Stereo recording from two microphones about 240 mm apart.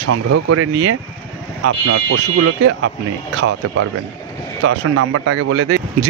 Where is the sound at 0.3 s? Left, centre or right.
Right.